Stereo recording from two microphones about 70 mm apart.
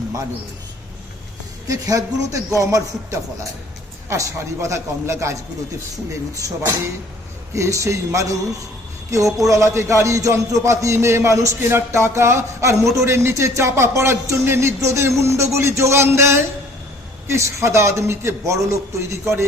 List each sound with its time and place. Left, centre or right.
1.6 s a man's voice: right
7.5 s a man's voice: right